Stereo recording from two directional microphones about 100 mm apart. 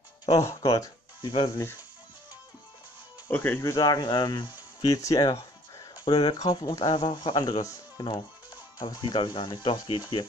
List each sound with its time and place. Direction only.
0.3 s speech: 30° left (ahead or behind)
1.2 s speech: 55° left (ahead or behind)
3.3 s speech: 20° left (ahead or behind)
3.7 s speech: 40° left (ahead or behind)